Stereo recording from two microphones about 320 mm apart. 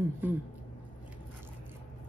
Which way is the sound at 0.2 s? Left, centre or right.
Centre.